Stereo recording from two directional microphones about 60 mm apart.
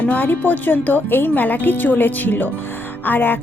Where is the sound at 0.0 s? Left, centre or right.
Left.